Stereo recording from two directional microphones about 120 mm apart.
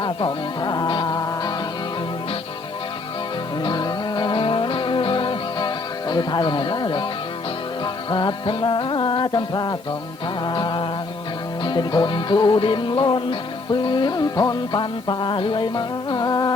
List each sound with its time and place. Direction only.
0.0 s music: 40° left (ahead or behind)
3.6 s music: 40° left (ahead or behind)
8.1 s music: 40° left (ahead or behind)